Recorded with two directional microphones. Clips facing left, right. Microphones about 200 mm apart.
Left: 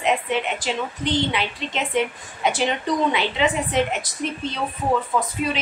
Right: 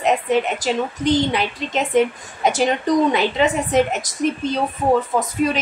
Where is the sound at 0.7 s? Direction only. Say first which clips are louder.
Right 7 dB; 45° right (ahead or behind).